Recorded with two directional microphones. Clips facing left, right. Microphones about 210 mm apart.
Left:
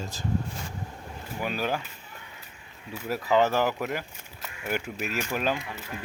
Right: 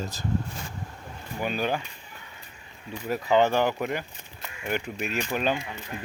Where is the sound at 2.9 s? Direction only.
Centre (ahead or behind).